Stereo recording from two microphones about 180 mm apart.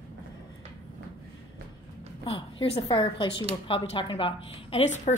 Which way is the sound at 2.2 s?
30° left (ahead or behind).